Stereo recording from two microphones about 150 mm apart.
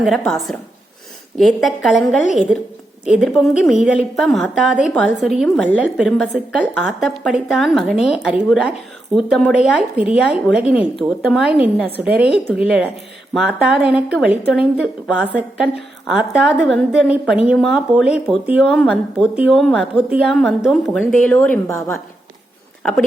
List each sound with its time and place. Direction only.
0.3 s a woman's voice: centre (ahead or behind)
16.1 s a woman's voice: 5° right (ahead or behind)
20.1 s a woman's voice: 10° right (ahead or behind)
20.3 s a woman's voice: centre (ahead or behind); by 21.9 s 20° left (ahead or behind)
22.8 s speech: centre (ahead or behind)